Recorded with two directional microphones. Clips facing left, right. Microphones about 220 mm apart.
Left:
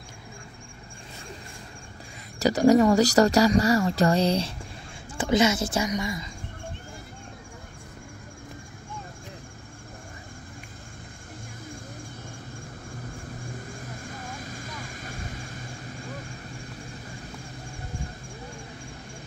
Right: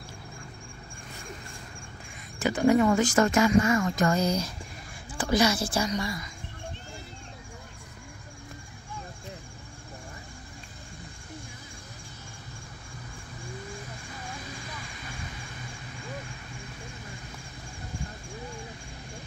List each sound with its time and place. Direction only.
2.3 s a woman's voice: 40° left (ahead or behind); by 6.2 s 20° left (ahead or behind)
14.0 s vehicle: 45° left (ahead or behind)